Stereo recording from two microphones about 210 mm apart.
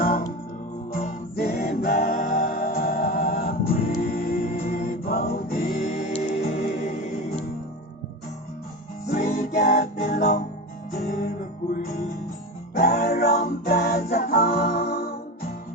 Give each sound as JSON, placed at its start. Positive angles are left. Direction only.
{"t": 0.0, "sound": "music", "side_deg": 40}
{"t": 9.2, "sound": "music", "side_deg": 35}